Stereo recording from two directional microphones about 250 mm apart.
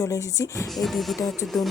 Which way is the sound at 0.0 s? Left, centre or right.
Centre.